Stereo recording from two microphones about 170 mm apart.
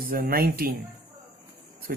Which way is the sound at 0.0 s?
60° right (ahead or behind).